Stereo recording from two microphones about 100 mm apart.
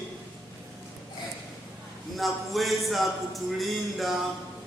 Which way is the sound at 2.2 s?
Centre (ahead or behind).